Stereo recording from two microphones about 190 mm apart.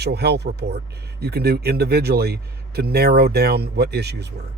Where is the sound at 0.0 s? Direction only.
60° right (ahead or behind).